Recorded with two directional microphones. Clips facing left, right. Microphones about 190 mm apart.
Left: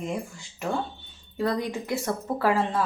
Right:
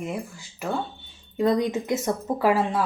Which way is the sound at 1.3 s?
20° right (ahead or behind).